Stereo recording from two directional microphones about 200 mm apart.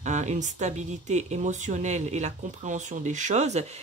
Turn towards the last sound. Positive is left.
turn(degrees=-35)  # may be behind; listen again after turning